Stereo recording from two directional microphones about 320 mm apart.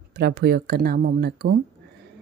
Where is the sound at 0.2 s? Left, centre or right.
Right.